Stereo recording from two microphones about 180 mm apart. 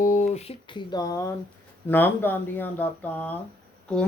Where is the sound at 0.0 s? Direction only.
45° left (ahead or behind).